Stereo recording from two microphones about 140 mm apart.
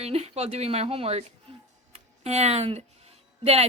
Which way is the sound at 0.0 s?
50° right (ahead or behind).